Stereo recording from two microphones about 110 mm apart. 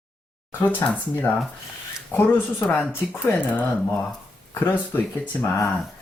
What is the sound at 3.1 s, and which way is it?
Speech, 20° left (ahead or behind).